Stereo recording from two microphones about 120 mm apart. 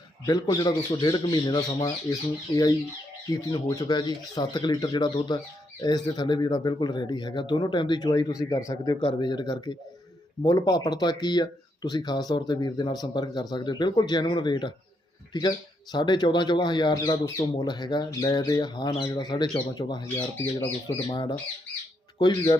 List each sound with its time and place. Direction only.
0.3 s speech: 35° left (ahead or behind)
3.3 s speech: 30° left (ahead or behind)
9.0 s speech: 45° left (ahead or behind)
20.1 s speech: 10° left (ahead or behind)
20.8 s speech: 40° left (ahead or behind)